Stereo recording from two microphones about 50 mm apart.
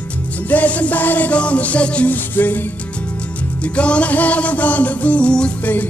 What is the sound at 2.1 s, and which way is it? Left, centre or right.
Music, left.